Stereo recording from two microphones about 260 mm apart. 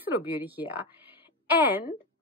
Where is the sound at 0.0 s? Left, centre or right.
Centre.